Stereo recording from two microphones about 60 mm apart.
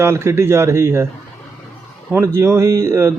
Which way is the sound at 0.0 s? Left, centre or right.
Right.